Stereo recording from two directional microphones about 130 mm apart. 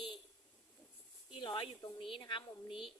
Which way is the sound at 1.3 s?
40° left (ahead or behind).